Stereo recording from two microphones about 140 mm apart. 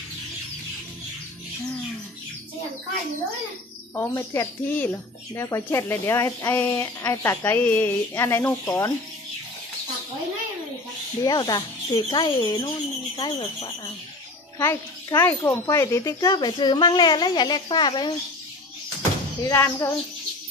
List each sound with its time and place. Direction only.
3.9 s speech: 20° left (ahead or behind)
11.2 s speech: 30° left (ahead or behind)
14.6 s speech: 20° left (ahead or behind)
19.4 s speech: 20° left (ahead or behind)